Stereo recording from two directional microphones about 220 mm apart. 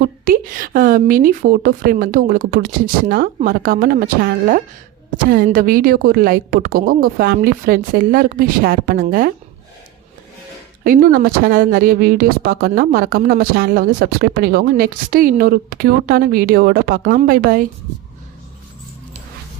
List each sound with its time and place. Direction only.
0.0 s a woman's voice: 40° right (ahead or behind)
10.8 s speech: 40° right (ahead or behind)